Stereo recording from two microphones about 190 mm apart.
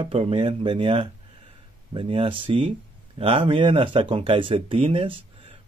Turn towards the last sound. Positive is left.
turn(degrees=-30)  # may be behind; listen again after turning